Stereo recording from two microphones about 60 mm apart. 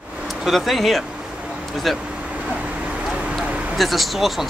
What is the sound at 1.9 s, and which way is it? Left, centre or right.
Speech, centre.